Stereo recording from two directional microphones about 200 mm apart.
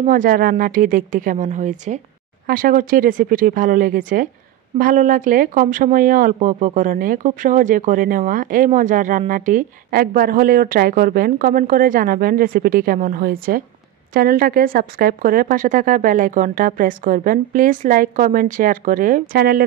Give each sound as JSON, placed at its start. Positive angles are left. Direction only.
{"t": 0.0, "sound": "a woman's voice", "side_deg": -45}